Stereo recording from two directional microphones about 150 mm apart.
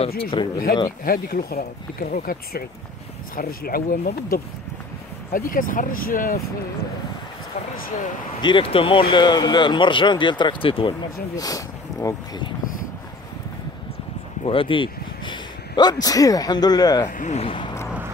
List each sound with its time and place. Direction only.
0.2 s speech: 35° left (ahead or behind)
1.0 s speech: 75° left (ahead or behind)
8.4 s speech: 35° left (ahead or behind)
11.3 s speech: 25° left (ahead or behind)
14.4 s speech: 35° left (ahead or behind)
17.1 s speech: 55° left (ahead or behind); by 17.7 s 35° left (ahead or behind)